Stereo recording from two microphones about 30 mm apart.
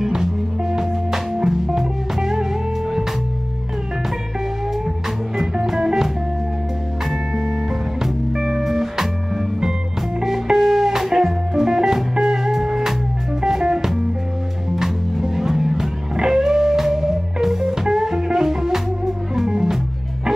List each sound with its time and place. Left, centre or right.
0.0 s music: centre
5.6 s music: centre
7.3 s music: centre
10.2 s music: centre